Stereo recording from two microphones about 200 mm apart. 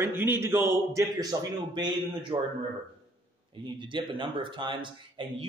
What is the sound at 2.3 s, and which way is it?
Speech, 20° right (ahead or behind).